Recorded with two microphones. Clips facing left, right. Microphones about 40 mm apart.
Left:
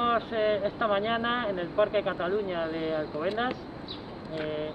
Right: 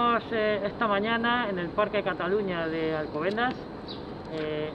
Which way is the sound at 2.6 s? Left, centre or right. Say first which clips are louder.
Right 2 dB; centre.